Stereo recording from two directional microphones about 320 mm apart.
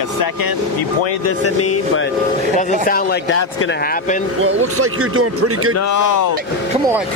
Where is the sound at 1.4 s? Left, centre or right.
Left.